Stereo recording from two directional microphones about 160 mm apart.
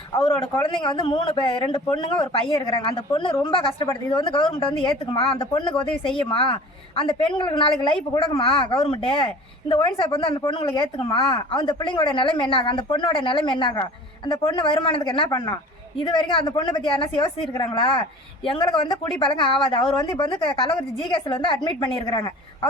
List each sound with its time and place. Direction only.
0.2 s a woman's voice: 30° left (ahead or behind)